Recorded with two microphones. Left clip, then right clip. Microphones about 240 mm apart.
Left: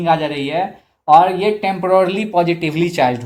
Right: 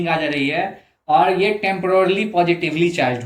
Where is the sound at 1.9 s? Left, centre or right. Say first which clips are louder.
Left 3 dB; left.